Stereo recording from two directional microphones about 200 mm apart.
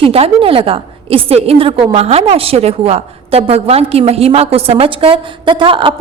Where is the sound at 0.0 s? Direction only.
30° right (ahead or behind).